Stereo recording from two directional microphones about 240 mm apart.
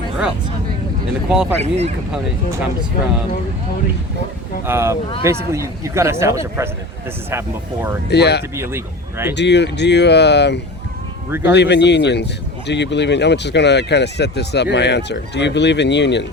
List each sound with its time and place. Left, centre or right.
1.3 s speech: centre
1.5 s speech: right
4.6 s speech: centre
8.0 s speech: left
8.5 s speech: centre
9.3 s speech: left